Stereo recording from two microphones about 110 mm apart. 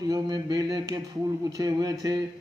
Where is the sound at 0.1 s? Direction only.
40° right (ahead or behind).